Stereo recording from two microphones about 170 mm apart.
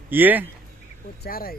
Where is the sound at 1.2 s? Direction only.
60° left (ahead or behind).